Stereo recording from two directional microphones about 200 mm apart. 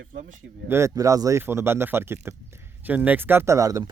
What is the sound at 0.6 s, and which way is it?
Speech, 15° right (ahead or behind).